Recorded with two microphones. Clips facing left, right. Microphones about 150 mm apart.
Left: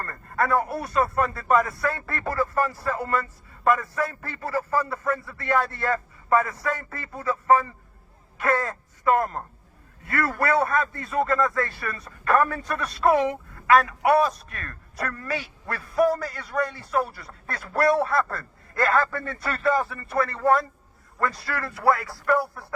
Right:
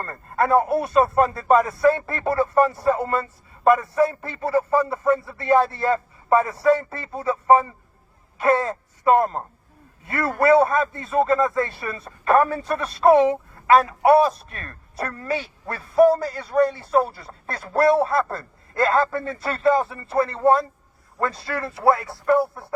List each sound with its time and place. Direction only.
0.0 s a man's voice: 25° right (ahead or behind)